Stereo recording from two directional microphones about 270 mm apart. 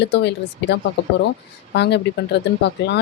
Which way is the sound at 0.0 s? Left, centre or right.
Left.